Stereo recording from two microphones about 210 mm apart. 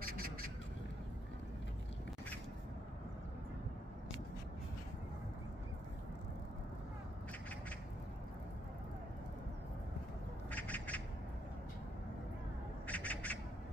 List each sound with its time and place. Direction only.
0.0 s a sound: 45° right (ahead or behind)
10.5 s squawk: 5° left (ahead or behind)
12.8 s bird: 5° left (ahead or behind)